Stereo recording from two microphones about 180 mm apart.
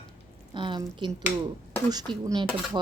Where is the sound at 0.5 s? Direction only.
25° right (ahead or behind).